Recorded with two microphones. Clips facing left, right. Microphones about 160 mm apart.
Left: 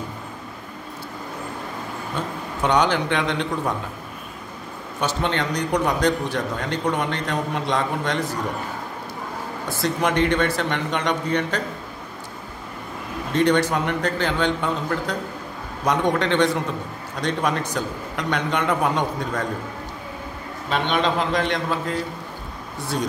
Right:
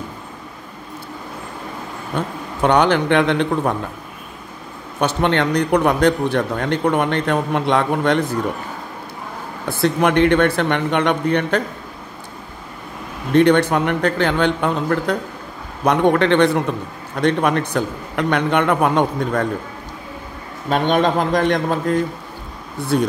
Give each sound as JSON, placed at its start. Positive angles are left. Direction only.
{"t": 2.2, "sound": "speech", "side_deg": -60}
{"t": 5.0, "sound": "speech", "side_deg": -65}
{"t": 9.7, "sound": "speech", "side_deg": -60}
{"t": 13.3, "sound": "speech", "side_deg": -60}
{"t": 20.7, "sound": "a man's voice", "side_deg": -45}
{"t": 22.9, "sound": "speech", "side_deg": -60}